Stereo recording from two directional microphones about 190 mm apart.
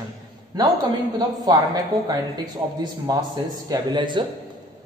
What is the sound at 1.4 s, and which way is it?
A man's voice, 20° right (ahead or behind).